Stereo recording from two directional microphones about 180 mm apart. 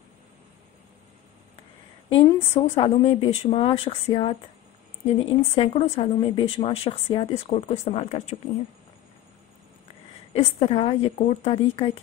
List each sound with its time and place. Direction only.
2.0 s speech: 35° left (ahead or behind)
10.3 s speech: 30° left (ahead or behind)